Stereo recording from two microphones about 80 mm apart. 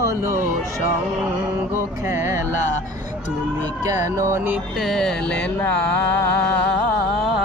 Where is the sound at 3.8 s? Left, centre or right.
Right.